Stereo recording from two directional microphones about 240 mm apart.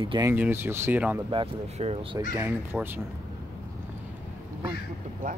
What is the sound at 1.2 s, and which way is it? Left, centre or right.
Speech, right.